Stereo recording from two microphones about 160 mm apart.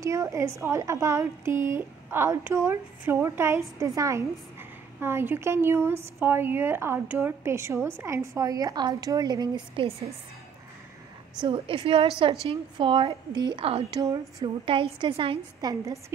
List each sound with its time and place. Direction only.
0.0 s a woman's voice: 20° right (ahead or behind)
11.4 s a woman's voice: 35° right (ahead or behind)
13.9 s a woman's voice: 25° right (ahead or behind)